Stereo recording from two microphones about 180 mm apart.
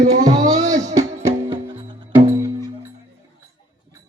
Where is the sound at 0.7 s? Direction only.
20° right (ahead or behind).